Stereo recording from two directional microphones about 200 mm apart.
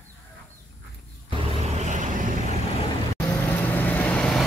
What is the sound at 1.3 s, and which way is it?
Vehicle, 35° right (ahead or behind).